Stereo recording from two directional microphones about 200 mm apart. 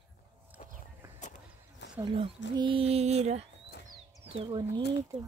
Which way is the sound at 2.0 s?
25° right (ahead or behind).